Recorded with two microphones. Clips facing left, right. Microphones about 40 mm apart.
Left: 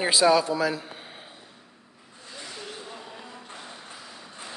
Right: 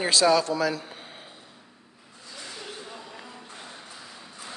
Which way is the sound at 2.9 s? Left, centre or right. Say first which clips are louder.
Left 1 dB; centre.